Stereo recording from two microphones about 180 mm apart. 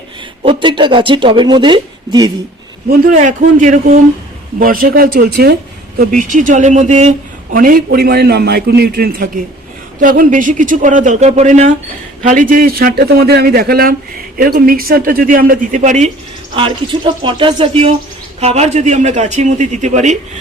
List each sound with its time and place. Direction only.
0.4 s speech: 25° right (ahead or behind)
2.9 s a man's voice: 45° right (ahead or behind)
7.5 s a man's voice: 50° right (ahead or behind)
16.6 s a man's voice: 25° right (ahead or behind)